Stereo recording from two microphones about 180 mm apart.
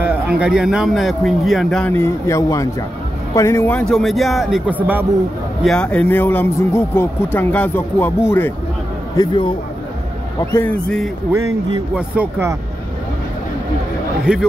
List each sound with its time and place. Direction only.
0.0 s speech: 10° right (ahead or behind)
5.6 s speech: 5° left (ahead or behind)
9.1 s speech: 25° left (ahead or behind)
10.4 s speech: 10° left (ahead or behind)
11.9 s speech: 10° right (ahead or behind)
14.3 s speech: 5° right (ahead or behind)